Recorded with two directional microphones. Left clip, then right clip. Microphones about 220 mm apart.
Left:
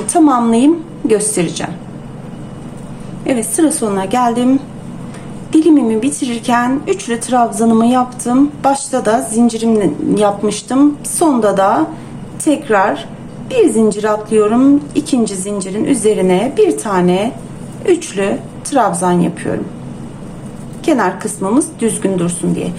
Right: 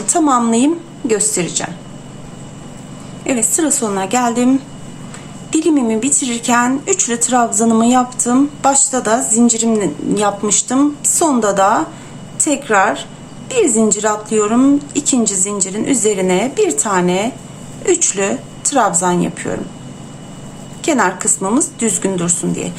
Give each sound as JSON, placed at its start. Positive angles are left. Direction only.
{"t": 0.1, "sound": "a woman's voice", "side_deg": -10}
{"t": 3.2, "sound": "a woman's voice", "side_deg": -10}
{"t": 20.8, "sound": "a woman's voice", "side_deg": -10}